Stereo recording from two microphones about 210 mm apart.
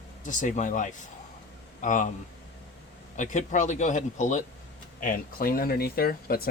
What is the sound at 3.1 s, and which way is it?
Speech, 35° left (ahead or behind).